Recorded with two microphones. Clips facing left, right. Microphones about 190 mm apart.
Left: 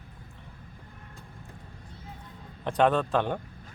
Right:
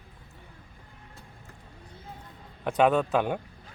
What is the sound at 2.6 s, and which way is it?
Speech, 5° right (ahead or behind).